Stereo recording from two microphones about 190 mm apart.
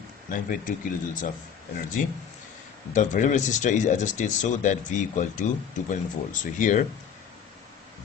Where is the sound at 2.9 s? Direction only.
40° left (ahead or behind).